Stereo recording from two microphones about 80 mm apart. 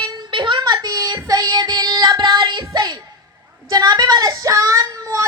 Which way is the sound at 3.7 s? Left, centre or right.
Right.